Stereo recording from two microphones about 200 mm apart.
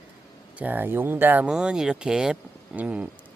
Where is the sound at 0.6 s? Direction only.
10° right (ahead or behind).